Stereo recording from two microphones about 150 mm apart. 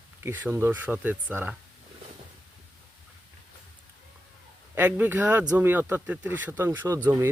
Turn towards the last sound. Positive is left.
turn(degrees=-15)  # may be behind; listen again after turning